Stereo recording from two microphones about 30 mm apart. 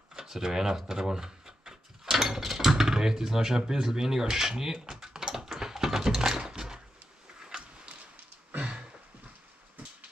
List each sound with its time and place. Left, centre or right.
0.1 s speech: centre
4.8 s typing: centre
7.4 s a sound: right